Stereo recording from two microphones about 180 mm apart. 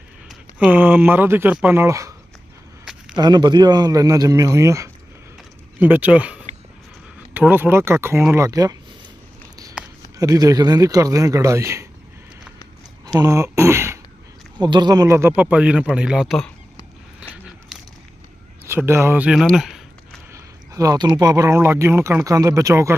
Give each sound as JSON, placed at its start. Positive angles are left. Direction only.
{"t": 0.3, "sound": "speech", "side_deg": -10}
{"t": 3.2, "sound": "speech", "side_deg": -25}
{"t": 10.2, "sound": "speech", "side_deg": -20}
{"t": 13.1, "sound": "speech", "side_deg": -15}
{"t": 18.7, "sound": "speech", "side_deg": -15}
{"t": 20.3, "sound": "a sound", "side_deg": -20}
{"t": 21.2, "sound": "speech", "side_deg": -20}